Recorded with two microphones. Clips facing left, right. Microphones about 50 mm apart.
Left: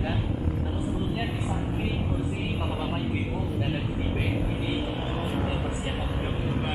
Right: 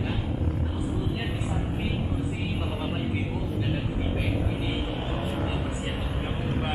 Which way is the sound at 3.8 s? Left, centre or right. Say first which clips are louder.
Even; centre.